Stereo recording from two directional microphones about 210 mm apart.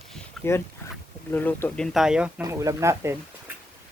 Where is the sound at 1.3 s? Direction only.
10° left (ahead or behind).